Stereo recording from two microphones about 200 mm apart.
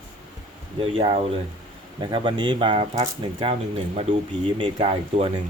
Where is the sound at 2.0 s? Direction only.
25° right (ahead or behind).